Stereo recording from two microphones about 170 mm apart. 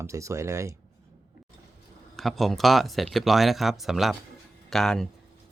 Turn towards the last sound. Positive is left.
turn(degrees=0)  # may be behind; listen again after turning